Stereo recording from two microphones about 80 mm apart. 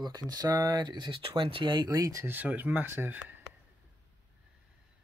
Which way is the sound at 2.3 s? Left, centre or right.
Right.